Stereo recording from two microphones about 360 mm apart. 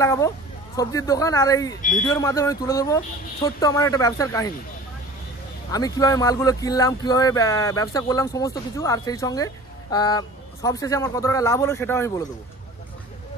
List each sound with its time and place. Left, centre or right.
0.0 s speech: centre
1.8 s speech: left
2.1 s speech: centre
5.7 s speech: centre